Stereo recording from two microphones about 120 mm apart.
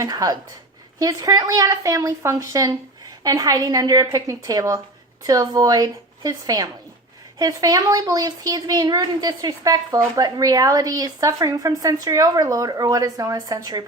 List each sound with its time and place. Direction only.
0.0 s a woman's voice: 30° right (ahead or behind)